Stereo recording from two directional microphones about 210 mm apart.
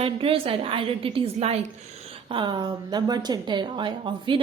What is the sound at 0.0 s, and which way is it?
Speech, 25° right (ahead or behind).